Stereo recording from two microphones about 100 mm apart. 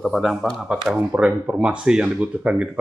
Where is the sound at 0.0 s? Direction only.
Centre (ahead or behind).